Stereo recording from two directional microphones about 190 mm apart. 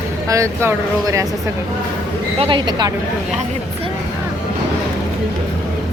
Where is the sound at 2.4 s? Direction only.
25° right (ahead or behind).